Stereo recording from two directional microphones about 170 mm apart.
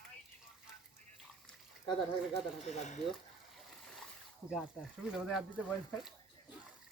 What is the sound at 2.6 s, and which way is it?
Speech, 45° left (ahead or behind).